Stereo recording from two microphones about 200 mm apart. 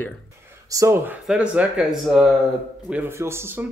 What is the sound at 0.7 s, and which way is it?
A man's voice, 15° right (ahead or behind).